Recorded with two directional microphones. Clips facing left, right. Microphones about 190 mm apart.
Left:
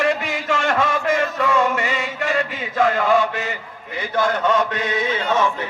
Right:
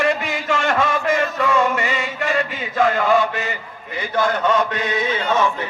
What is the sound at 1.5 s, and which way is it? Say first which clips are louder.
Chant: right 1 dB; 50° left (ahead or behind).